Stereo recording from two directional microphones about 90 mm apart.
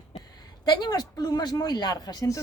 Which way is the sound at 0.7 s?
50° left (ahead or behind).